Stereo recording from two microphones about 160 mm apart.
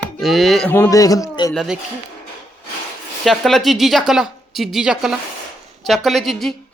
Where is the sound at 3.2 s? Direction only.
Centre (ahead or behind).